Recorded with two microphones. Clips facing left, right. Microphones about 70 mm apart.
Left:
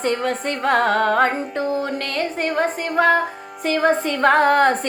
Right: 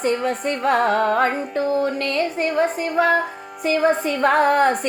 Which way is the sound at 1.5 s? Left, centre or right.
Left.